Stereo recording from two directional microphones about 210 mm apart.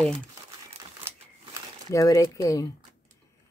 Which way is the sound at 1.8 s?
15° left (ahead or behind).